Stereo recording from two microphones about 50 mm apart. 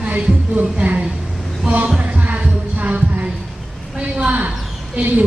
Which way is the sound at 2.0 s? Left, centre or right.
Right.